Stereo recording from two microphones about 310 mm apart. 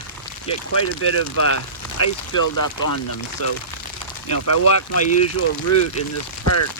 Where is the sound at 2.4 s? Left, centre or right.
Left.